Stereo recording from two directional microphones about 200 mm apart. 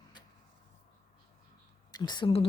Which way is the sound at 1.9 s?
20° left (ahead or behind).